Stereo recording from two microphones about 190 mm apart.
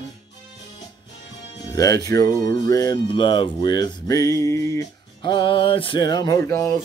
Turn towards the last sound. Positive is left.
turn(degrees=10)  # may be behind; listen again after turning